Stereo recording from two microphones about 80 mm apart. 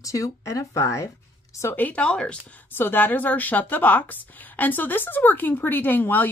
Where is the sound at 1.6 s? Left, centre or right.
Left.